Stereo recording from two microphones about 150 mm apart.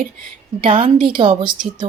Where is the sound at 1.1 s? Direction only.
35° right (ahead or behind).